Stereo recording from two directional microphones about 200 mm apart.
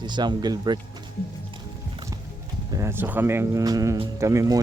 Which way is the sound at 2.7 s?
15° right (ahead or behind).